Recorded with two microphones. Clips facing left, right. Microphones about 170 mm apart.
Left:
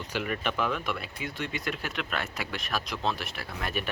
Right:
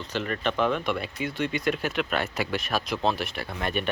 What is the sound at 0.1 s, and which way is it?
Speech, 10° left (ahead or behind).